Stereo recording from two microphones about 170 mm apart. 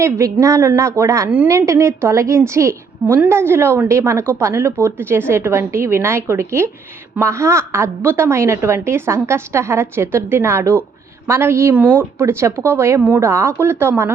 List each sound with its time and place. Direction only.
0.0 s a woman's voice: 20° right (ahead or behind)